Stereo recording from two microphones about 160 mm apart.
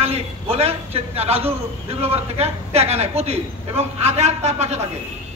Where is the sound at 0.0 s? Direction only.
40° right (ahead or behind).